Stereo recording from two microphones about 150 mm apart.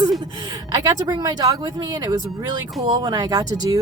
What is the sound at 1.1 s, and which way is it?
Speech, 25° right (ahead or behind).